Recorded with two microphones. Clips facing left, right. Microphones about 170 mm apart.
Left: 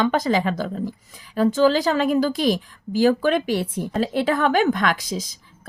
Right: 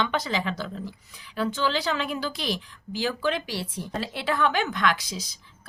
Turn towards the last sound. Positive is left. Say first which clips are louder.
# left 4 dB
turn(degrees=45)  # may be behind; listen again after turning